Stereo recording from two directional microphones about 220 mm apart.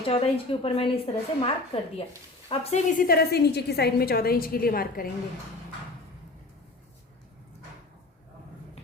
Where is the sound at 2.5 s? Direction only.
35° left (ahead or behind).